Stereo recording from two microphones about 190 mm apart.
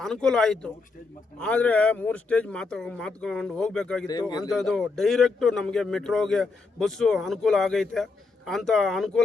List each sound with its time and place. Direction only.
0.0 s a man's voice: 5° left (ahead or behind)
4.0 s speech: 20° left (ahead or behind)
4.4 s a man's voice: centre (ahead or behind)